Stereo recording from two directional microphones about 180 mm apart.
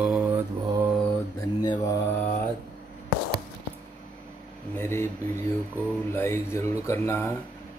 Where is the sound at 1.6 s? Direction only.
20° left (ahead or behind).